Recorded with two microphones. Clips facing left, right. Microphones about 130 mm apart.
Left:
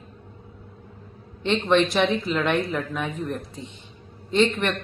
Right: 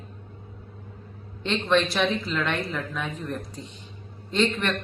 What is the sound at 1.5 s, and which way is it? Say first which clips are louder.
Speech: left 3 dB; 15° left (ahead or behind).